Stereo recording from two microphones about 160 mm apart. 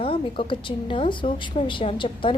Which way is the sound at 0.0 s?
35° left (ahead or behind).